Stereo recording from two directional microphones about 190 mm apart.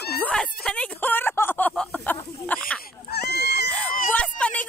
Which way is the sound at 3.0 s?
60° left (ahead or behind).